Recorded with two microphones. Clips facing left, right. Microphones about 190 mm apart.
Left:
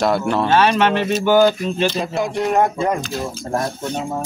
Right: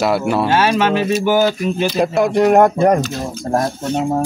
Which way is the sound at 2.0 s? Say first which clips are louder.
Right 7 dB; 60° right (ahead or behind).